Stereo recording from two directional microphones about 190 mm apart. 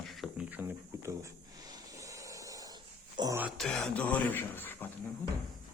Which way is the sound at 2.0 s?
15° right (ahead or behind).